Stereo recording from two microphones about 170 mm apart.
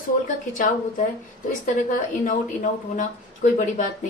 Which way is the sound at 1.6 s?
50° left (ahead or behind).